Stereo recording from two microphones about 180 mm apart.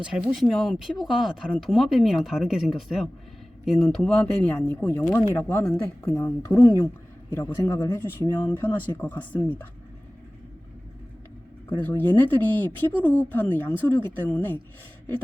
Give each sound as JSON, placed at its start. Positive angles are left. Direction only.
{"t": 0.0, "sound": "speech", "side_deg": -5}
{"t": 11.8, "sound": "speech", "side_deg": 10}